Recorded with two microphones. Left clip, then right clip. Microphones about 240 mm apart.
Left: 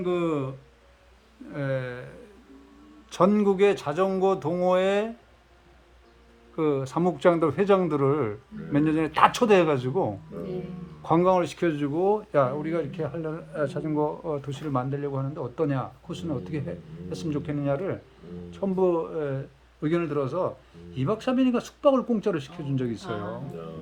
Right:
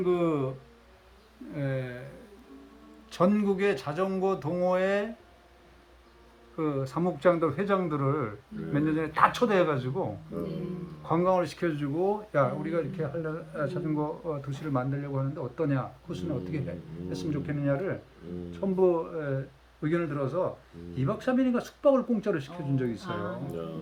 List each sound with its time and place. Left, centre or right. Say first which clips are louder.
0.0 s speech: even; centre
1.5 s speech: left 4 dB; centre
3.1 s speech: left 4 dB; left
6.6 s speech: left 5 dB; left